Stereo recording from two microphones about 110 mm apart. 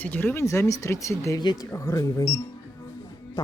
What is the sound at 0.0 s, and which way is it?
Speech, 15° left (ahead or behind).